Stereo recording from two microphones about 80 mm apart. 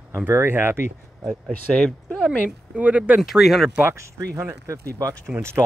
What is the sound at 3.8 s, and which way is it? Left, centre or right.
Speech, right.